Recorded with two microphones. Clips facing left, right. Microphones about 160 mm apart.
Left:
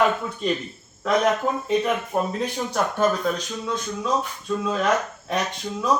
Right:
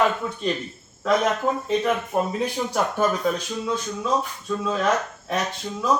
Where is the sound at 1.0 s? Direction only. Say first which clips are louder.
Even; 5° left (ahead or behind).